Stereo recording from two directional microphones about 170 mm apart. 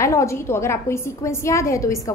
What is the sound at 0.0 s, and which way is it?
A woman's voice, 15° left (ahead or behind).